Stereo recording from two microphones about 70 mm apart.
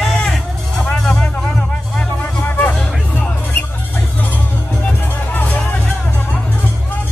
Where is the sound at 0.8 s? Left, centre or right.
Centre.